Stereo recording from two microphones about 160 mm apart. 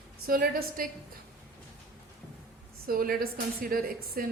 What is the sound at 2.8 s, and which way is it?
A woman's voice, 65° right (ahead or behind).